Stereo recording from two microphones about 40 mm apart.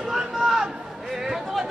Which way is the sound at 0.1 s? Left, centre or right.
Centre.